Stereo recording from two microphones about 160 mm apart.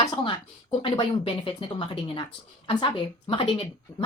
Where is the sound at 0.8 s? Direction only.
35° left (ahead or behind).